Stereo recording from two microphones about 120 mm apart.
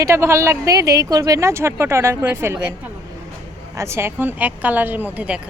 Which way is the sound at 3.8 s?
20° right (ahead or behind).